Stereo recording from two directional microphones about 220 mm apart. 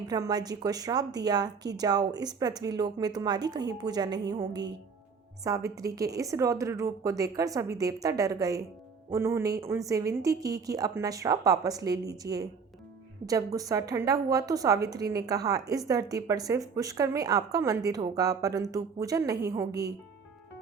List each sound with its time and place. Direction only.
0.1 s a woman's voice: 15° right (ahead or behind)
4.3 s music: 20° right (ahead or behind)
5.4 s a woman's voice: 15° right (ahead or behind)